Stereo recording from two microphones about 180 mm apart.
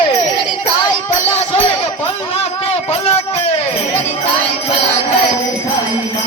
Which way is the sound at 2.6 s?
35° left (ahead or behind).